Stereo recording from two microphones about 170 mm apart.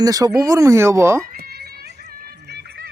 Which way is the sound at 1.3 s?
65° right (ahead or behind).